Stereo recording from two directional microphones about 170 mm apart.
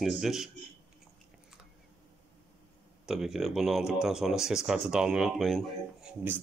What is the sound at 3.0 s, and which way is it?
Speech, 5° right (ahead or behind).